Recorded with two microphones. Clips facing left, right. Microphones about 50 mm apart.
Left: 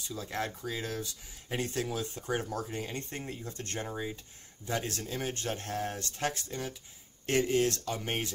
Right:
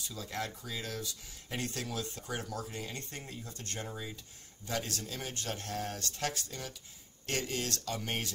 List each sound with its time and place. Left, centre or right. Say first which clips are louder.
0.1 s speech: left 4 dB; left